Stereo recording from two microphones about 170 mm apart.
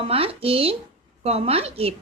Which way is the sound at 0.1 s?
35° right (ahead or behind).